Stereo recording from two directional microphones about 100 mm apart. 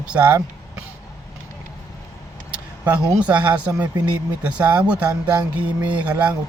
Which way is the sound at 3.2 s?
15° right (ahead or behind).